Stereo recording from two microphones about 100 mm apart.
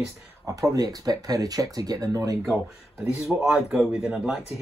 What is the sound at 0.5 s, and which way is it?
Speech, 35° right (ahead or behind).